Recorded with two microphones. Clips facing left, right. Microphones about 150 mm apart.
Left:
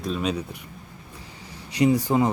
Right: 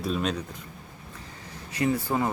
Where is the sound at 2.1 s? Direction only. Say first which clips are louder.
Left 5 dB; 15° left (ahead or behind).